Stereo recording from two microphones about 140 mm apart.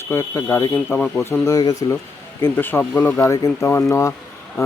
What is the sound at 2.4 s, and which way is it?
A man's voice, 15° left (ahead or behind).